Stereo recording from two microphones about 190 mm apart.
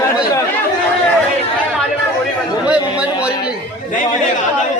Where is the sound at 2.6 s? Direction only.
5° right (ahead or behind).